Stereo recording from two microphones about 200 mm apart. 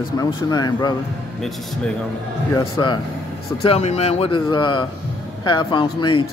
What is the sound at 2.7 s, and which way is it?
Speech, 20° left (ahead or behind).